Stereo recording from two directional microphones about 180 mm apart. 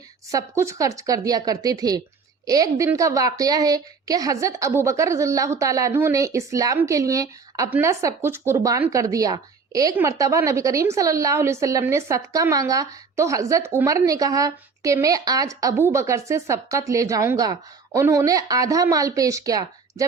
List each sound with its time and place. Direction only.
0.3 s a woman's voice: 15° right (ahead or behind)